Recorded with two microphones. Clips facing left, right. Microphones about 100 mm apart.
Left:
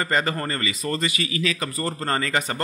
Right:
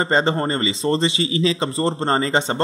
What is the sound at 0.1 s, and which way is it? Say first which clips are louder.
A man's voice: right 5 dB; 25° right (ahead or behind).